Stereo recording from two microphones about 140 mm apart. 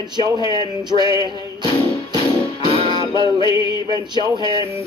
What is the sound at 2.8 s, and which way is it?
Music, 40° left (ahead or behind).